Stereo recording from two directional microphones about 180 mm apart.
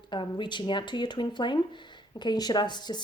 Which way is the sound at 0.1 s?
25° left (ahead or behind).